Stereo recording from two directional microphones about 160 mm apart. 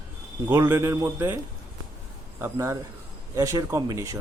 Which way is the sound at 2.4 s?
20° right (ahead or behind).